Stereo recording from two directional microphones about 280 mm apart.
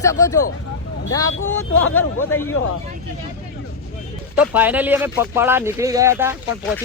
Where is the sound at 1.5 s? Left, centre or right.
Left.